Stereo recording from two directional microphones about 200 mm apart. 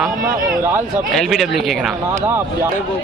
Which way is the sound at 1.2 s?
Centre (ahead or behind).